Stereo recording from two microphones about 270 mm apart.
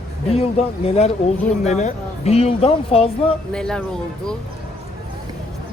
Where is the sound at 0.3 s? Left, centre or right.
Left.